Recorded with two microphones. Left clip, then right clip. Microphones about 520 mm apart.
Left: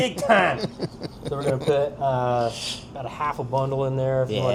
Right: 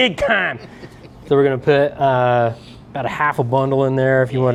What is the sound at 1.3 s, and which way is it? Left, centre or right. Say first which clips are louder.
Speech: right 9 dB; right.